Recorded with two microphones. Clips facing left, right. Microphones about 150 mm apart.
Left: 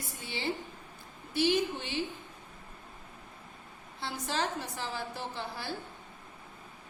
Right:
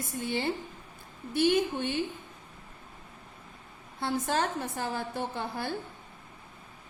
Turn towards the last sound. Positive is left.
turn(degrees=-50)  # may be behind; listen again after turning